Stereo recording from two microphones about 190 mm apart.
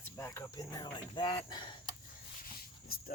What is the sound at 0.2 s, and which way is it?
Speech, 15° left (ahead or behind).